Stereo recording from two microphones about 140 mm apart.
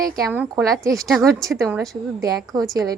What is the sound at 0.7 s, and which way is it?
Speech, centre (ahead or behind).